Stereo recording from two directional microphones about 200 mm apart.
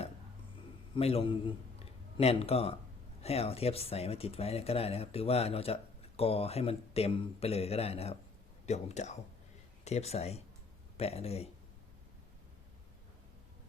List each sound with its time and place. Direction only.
0.9 s a man's voice: 30° left (ahead or behind)